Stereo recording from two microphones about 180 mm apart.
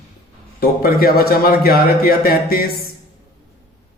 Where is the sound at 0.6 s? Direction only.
55° left (ahead or behind).